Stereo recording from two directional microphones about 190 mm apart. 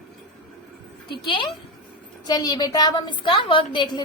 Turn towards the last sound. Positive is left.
turn(degrees=25)  # may be behind; listen again after turning